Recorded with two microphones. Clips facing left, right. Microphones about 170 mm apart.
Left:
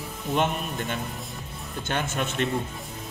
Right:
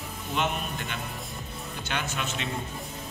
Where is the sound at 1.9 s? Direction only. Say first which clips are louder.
Left 4 dB; 45° left (ahead or behind).